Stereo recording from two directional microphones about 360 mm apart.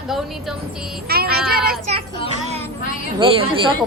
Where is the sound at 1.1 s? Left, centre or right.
Right.